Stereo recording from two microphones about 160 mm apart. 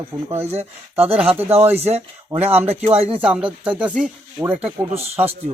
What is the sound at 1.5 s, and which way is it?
Speech, 15° right (ahead or behind).